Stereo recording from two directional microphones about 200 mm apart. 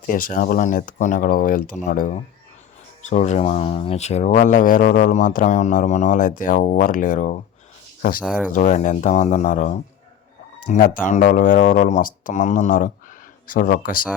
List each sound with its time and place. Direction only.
0.1 s speech: 45° left (ahead or behind)
8.5 s speech: 40° left (ahead or behind)